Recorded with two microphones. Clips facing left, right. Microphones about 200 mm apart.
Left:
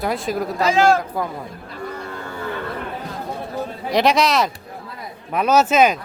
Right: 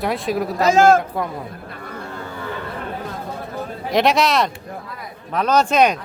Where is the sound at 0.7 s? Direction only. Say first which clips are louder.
Right 3 dB; 45° right (ahead or behind).